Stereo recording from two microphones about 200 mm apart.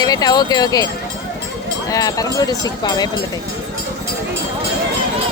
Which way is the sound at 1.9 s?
20° left (ahead or behind).